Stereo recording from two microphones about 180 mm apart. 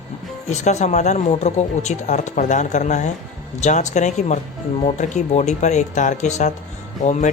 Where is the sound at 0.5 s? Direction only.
40° left (ahead or behind).